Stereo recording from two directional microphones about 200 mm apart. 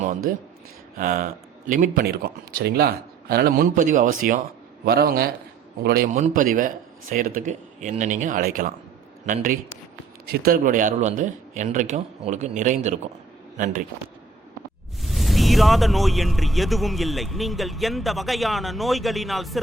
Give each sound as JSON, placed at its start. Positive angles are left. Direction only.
{"t": 0.3, "sound": "a man's voice", "side_deg": -45}
{"t": 15.0, "sound": "speech", "side_deg": 0}